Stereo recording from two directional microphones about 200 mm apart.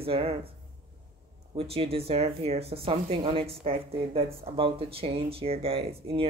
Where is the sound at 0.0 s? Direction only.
30° right (ahead or behind).